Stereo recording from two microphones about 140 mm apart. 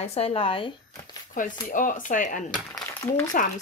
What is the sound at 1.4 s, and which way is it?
Speech, 70° left (ahead or behind).